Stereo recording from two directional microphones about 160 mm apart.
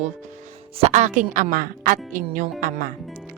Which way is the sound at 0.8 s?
45° right (ahead or behind).